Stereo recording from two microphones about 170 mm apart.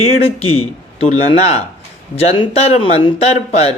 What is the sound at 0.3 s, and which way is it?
Speech, 35° left (ahead or behind).